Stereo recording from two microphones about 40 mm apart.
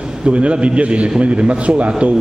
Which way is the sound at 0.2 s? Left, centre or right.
Right.